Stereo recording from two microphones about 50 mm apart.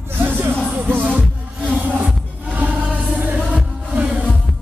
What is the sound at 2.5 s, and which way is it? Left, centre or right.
Music, right.